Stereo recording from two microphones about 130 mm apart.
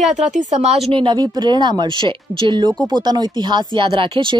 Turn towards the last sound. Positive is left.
turn(degrees=-40)  # may be behind; listen again after turning